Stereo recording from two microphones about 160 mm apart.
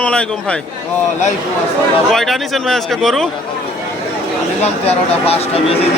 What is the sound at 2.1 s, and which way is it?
Speech, centre (ahead or behind).